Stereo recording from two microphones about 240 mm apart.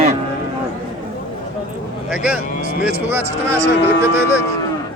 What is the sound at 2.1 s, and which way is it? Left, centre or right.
Vehicle, centre.